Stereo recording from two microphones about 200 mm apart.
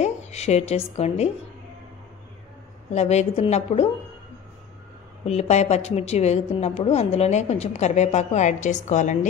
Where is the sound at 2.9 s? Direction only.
30° left (ahead or behind).